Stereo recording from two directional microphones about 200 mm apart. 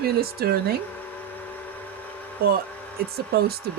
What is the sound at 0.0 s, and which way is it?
Speech, 50° right (ahead or behind).